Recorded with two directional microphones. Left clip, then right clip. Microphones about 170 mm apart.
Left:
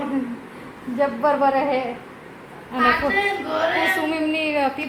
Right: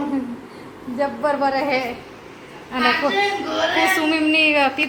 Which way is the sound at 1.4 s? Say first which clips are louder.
Even; 5° left (ahead or behind).